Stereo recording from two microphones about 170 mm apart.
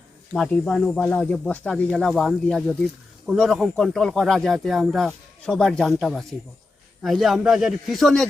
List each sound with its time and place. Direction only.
0.3 s speech: centre (ahead or behind)